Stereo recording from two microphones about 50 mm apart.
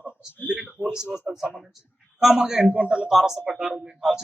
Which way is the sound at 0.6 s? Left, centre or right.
Centre.